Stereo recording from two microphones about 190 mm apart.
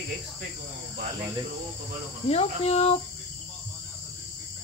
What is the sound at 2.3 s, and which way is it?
Speech, 35° left (ahead or behind).